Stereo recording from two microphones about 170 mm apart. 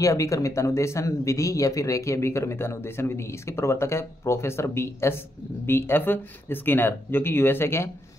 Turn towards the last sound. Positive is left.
turn(degrees=15)  # may be behind; listen again after turning